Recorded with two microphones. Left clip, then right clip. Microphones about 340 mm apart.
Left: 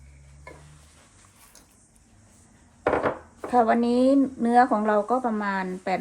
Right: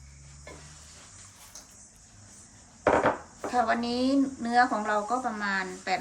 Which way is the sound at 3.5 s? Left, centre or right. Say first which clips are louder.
Left 6 dB; centre.